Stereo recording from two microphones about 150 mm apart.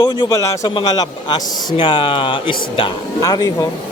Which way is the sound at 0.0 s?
25° left (ahead or behind).